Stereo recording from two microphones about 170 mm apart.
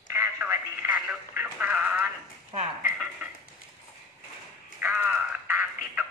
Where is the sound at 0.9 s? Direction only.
5° right (ahead or behind).